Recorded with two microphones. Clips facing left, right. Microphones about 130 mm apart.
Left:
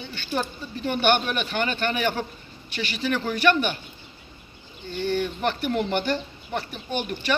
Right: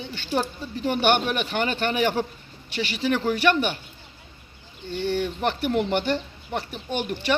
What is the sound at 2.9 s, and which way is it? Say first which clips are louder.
Speech: right 3 dB; 5° right (ahead or behind).